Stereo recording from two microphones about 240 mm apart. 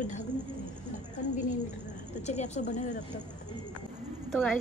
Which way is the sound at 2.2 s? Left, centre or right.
Left.